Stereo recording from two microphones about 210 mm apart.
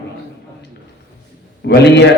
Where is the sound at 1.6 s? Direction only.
55° left (ahead or behind).